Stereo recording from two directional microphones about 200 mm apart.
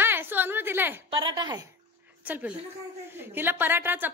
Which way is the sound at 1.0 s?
20° right (ahead or behind).